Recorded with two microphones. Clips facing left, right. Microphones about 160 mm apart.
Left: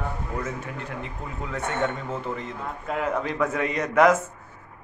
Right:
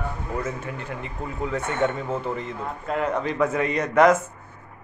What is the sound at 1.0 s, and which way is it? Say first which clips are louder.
A man's voice: right 5 dB; centre (ahead or behind).